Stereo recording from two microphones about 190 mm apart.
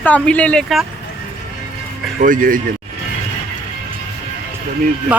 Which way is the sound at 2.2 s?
45° right (ahead or behind).